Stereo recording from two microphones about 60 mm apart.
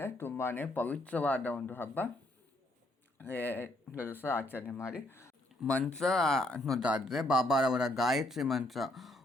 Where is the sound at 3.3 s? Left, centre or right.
Left.